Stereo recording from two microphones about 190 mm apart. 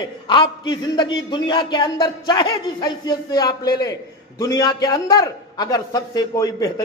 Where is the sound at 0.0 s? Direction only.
25° left (ahead or behind).